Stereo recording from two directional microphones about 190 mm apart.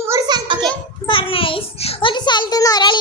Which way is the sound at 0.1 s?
20° right (ahead or behind).